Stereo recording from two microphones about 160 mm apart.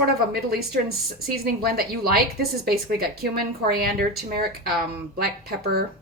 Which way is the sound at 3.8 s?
75° right (ahead or behind).